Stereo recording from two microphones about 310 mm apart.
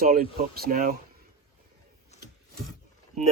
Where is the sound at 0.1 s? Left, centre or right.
Right.